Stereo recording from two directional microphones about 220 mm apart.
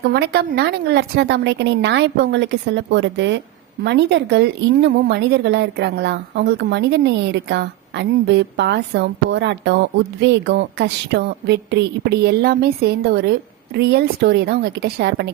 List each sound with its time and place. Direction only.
0.0 s speech: 50° right (ahead or behind)